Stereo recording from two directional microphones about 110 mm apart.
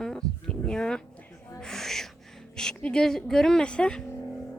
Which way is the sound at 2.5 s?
5° left (ahead or behind).